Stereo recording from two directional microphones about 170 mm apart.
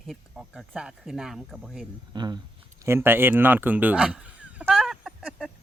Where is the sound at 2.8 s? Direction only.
15° right (ahead or behind).